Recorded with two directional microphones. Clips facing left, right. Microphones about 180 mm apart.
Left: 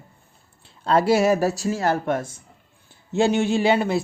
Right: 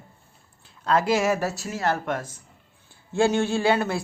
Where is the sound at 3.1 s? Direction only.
20° left (ahead or behind).